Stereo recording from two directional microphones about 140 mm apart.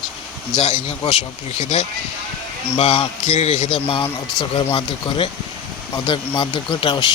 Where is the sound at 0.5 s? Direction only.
55° left (ahead or behind).